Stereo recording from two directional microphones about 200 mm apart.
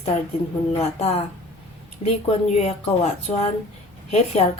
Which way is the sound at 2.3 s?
30° left (ahead or behind).